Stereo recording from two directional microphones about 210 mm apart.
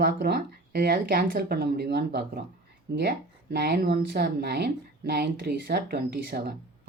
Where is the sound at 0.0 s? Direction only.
45° right (ahead or behind).